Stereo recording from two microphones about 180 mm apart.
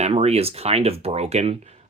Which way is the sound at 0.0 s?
35° right (ahead or behind).